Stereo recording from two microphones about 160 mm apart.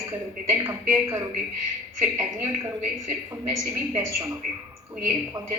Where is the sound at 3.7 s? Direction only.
15° right (ahead or behind).